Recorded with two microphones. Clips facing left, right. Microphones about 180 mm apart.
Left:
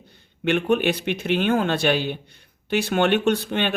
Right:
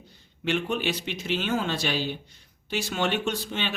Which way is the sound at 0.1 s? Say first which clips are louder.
Left 5 dB; 60° left (ahead or behind).